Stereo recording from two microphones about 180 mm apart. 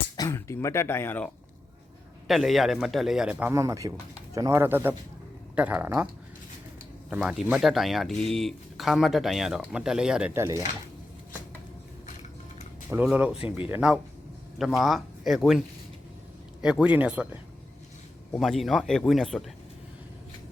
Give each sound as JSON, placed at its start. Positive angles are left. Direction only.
{"t": 0.2, "sound": "speech", "side_deg": 15}
{"t": 2.2, "sound": "speech", "side_deg": 0}
{"t": 3.5, "sound": "speech", "side_deg": -15}
{"t": 7.1, "sound": "speech", "side_deg": -5}
{"t": 12.9, "sound": "speech", "side_deg": -10}
{"t": 13.3, "sound": "speech", "side_deg": 30}
{"t": 13.7, "sound": "speech", "side_deg": -5}
{"t": 18.3, "sound": "speech", "side_deg": 0}